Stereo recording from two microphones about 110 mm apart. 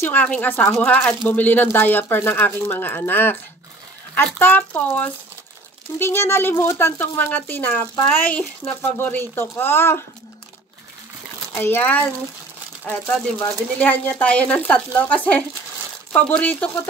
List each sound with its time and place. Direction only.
0.0 s speech: 15° left (ahead or behind)
4.4 s speech: 15° left (ahead or behind)
11.5 s speech: 20° left (ahead or behind)